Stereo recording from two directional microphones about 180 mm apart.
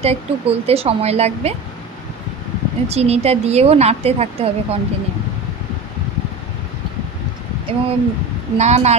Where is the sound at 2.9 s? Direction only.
35° right (ahead or behind).